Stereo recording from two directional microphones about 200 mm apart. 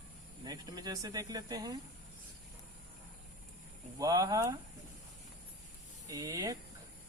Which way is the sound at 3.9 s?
20° right (ahead or behind).